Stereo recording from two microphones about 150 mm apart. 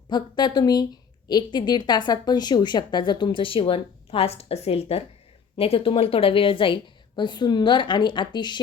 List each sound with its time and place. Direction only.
0.1 s a woman's voice: 30° left (ahead or behind)